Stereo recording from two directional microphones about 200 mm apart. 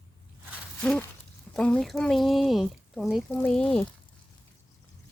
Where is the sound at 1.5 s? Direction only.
5° left (ahead or behind).